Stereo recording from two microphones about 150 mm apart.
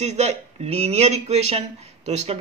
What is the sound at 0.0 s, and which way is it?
Speech, 50° right (ahead or behind).